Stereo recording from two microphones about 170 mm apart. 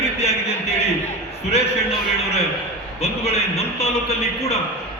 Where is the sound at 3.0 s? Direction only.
35° left (ahead or behind).